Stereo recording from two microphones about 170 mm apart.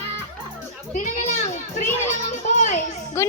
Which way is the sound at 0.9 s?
50° left (ahead or behind).